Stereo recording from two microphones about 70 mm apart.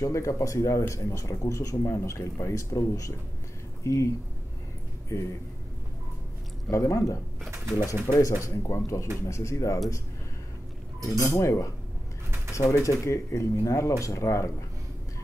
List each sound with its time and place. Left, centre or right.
0.0 s speech: left
5.1 s speech: left
6.7 s speech: left
11.0 s speech: left